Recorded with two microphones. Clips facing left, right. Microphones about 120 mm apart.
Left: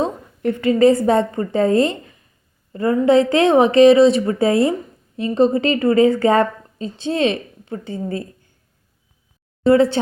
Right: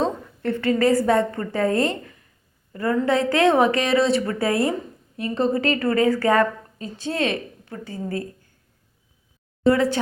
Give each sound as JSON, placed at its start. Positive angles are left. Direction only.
{"t": 0.0, "sound": "a woman's voice", "side_deg": 15}
{"t": 9.6, "sound": "a woman's voice", "side_deg": 30}